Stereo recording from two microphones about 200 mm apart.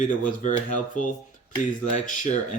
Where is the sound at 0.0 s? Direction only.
40° left (ahead or behind).